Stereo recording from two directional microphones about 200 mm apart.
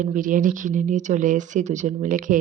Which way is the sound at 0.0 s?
40° right (ahead or behind).